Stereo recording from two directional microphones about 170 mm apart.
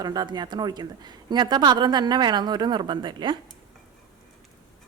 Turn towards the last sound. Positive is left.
turn(degrees=-25)  # may be behind; listen again after turning